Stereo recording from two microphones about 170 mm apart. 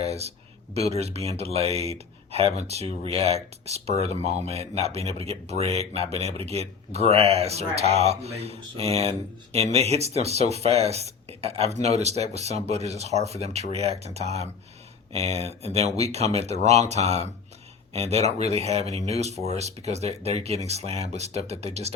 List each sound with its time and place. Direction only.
0.0 s speech: 40° right (ahead or behind)